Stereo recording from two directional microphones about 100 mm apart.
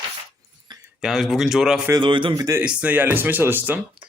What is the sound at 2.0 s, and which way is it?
Speech, 55° right (ahead or behind).